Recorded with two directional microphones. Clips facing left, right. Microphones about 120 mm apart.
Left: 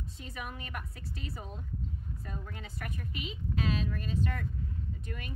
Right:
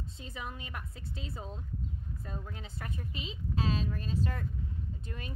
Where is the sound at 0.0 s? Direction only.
25° right (ahead or behind).